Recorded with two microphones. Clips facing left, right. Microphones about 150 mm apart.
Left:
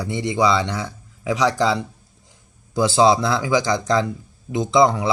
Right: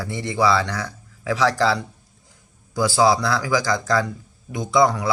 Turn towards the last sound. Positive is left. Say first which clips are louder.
# left 2 dB
turn(degrees=25)  # may be behind; listen again after turning